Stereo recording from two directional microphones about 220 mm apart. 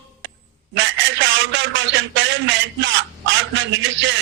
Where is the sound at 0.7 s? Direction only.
55° right (ahead or behind).